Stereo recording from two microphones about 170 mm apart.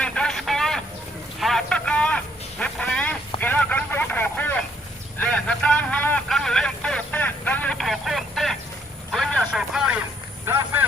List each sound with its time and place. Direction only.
0.0 s radio: 5° left (ahead or behind)
1.4 s a sound: centre (ahead or behind)
9.1 s vehicle: 5° left (ahead or behind)